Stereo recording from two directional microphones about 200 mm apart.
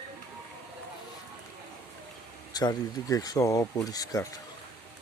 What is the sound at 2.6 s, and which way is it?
Speech, 20° left (ahead or behind).